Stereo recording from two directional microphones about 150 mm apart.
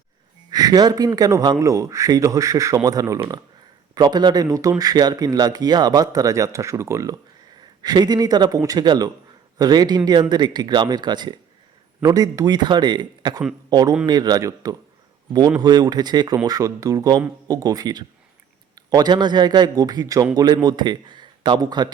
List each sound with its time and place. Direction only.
0.5 s speech: 25° right (ahead or behind)